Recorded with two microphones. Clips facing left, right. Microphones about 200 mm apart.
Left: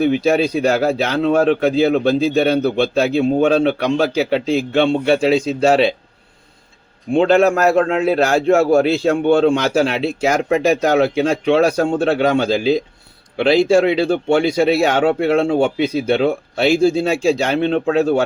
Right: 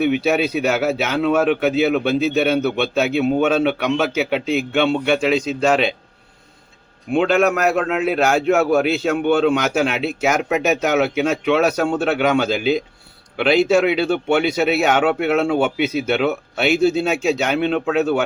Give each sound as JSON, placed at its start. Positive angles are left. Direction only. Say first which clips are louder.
{"t": 0.7, "sound": "speech", "louder": "left 3 dB", "side_deg": 35}
{"t": 7.1, "sound": "speech", "louder": "left 3 dB", "side_deg": 35}